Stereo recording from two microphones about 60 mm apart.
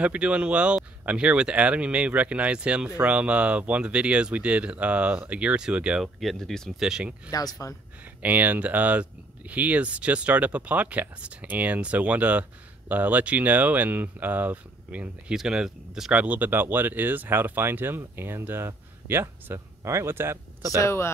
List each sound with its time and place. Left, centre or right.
0.0 s speech: right
6.3 s speech: centre
6.8 s speech: centre
7.2 s speech: left
8.2 s speech: right
15.3 s speech: centre; by 19.6 s right
19.8 s speech: right
20.7 s speech: left